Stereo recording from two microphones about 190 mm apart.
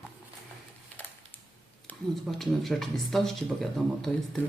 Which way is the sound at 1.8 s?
Centre (ahead or behind).